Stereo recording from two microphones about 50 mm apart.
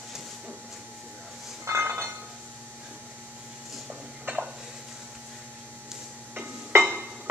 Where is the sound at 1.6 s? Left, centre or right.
Right.